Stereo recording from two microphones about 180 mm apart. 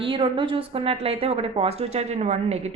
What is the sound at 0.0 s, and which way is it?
A woman's voice, 30° right (ahead or behind).